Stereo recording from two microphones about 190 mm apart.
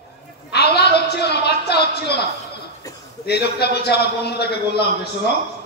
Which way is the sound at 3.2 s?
60° left (ahead or behind).